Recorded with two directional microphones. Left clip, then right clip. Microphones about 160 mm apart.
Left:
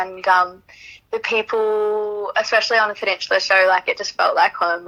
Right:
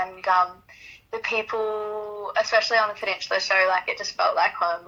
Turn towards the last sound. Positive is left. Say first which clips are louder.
# left 5 dB
turn(degrees=50)  # may be behind; listen again after turning